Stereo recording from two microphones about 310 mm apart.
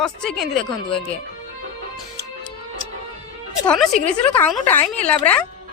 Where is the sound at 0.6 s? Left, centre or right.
Centre.